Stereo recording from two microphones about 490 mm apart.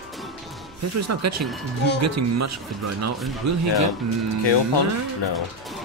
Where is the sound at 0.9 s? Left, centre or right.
Right.